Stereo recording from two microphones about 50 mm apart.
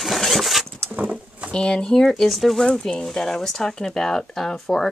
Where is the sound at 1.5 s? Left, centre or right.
Centre.